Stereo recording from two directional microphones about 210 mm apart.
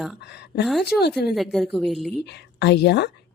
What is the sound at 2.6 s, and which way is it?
Speech, 55° left (ahead or behind).